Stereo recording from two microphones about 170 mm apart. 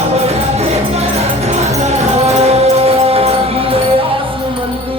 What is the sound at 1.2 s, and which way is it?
Music, 40° right (ahead or behind).